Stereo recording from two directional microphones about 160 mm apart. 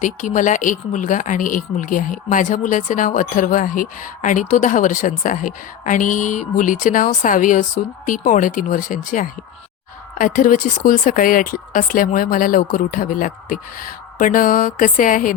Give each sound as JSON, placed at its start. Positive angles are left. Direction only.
{"t": 0.0, "sound": "speech", "side_deg": 50}